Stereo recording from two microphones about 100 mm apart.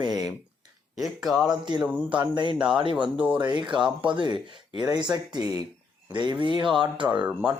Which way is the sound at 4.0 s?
55° right (ahead or behind).